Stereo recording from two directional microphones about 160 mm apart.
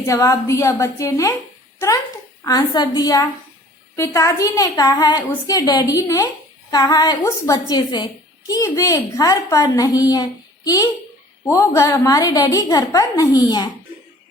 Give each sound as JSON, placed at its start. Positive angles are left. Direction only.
{"t": 0.0, "sound": "a woman's voice", "side_deg": 20}
{"t": 2.4, "sound": "a woman's voice", "side_deg": 20}